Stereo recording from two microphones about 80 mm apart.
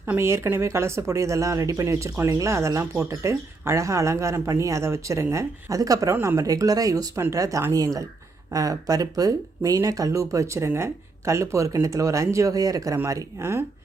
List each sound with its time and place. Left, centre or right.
0.2 s speech: right
13.1 s speech: right